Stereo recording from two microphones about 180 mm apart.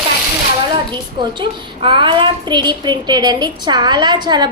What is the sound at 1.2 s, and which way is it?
A woman's voice, 25° right (ahead or behind).